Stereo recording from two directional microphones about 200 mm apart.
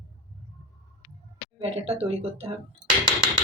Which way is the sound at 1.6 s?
30° right (ahead or behind).